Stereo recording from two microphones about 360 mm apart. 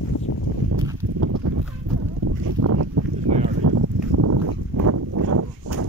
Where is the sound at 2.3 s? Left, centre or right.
Right.